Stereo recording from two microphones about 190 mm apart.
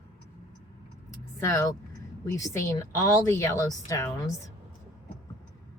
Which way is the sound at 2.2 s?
15° left (ahead or behind).